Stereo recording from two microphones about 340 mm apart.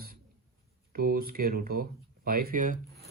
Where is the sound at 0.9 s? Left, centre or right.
Right.